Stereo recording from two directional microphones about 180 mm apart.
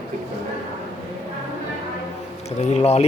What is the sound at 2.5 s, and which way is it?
Speech, 40° left (ahead or behind).